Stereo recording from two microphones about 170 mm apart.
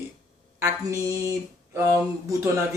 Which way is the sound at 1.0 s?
20° right (ahead or behind).